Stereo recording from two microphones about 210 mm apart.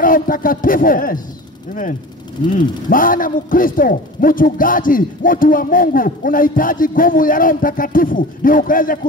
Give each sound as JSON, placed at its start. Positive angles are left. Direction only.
{"t": 0.0, "sound": "a man's voice", "side_deg": 40}
{"t": 2.9, "sound": "a man's voice", "side_deg": 40}